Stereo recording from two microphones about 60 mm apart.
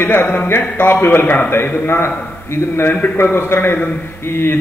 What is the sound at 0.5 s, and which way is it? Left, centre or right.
A man's voice, left.